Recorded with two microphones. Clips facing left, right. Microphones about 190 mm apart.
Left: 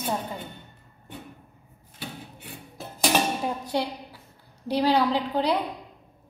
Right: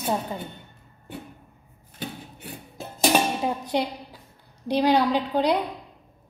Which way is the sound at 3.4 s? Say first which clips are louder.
Right 2 dB; 20° right (ahead or behind).